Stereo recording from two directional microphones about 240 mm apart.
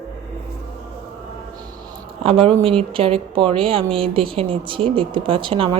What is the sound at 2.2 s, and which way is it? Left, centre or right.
Speech, right.